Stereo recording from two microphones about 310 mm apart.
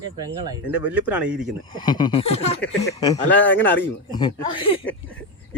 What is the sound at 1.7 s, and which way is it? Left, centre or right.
Speech, centre.